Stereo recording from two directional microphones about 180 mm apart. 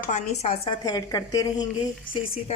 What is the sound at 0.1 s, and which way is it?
Speech, 40° left (ahead or behind).